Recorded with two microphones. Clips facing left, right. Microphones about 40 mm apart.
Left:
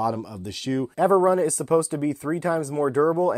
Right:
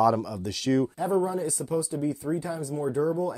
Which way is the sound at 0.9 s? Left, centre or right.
Left.